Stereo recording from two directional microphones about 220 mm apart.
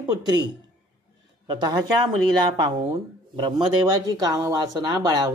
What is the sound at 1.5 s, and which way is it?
Speech, 20° right (ahead or behind).